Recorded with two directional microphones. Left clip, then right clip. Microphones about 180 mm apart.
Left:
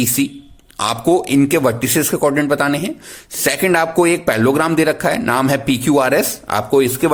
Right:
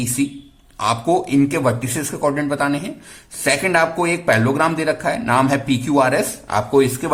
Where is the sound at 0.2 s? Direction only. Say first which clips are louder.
Left 3 dB; 40° left (ahead or behind).